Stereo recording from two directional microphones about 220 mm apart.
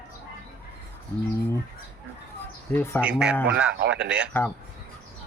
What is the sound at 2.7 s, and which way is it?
Speech, 10° left (ahead or behind).